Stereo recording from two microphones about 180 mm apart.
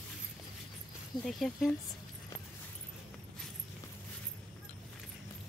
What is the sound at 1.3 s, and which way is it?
Speech, centre (ahead or behind).